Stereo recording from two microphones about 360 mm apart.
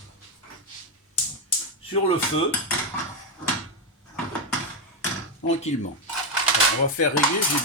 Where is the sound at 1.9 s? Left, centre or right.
Centre.